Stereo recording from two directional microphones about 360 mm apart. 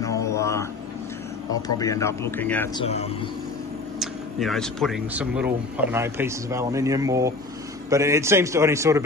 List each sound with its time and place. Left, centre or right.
0.0 s a sound: centre
1.5 s speech: centre
4.0 s a man's voice: centre